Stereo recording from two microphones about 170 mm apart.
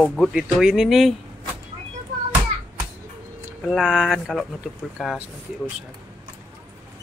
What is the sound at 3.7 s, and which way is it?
Speech, 5° right (ahead or behind).